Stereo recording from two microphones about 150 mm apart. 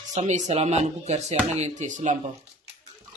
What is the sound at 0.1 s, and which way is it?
Speech, 50° right (ahead or behind).